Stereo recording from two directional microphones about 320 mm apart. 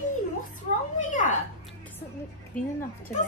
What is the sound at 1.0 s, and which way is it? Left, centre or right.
Speech, left.